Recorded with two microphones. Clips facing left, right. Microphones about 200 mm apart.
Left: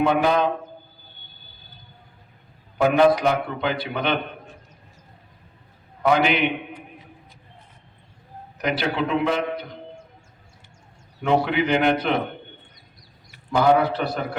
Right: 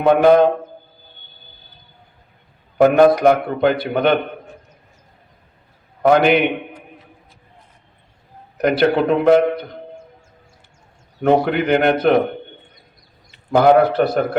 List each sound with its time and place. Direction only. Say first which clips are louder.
0.0 s a man's voice: right 8 dB; 55° right (ahead or behind)
2.8 s a man's voice: right 6 dB; 50° right (ahead or behind)
6.0 s a man's voice: right 6 dB; 55° right (ahead or behind)
8.5 s a man's voice: right 9 dB; 55° right (ahead or behind)
11.2 s a man's voice: right 5 dB; 55° right (ahead or behind)
13.5 s a man's voice: right 6 dB; 60° right (ahead or behind)
14.0 s a man's voice: right 9 dB; 45° right (ahead or behind)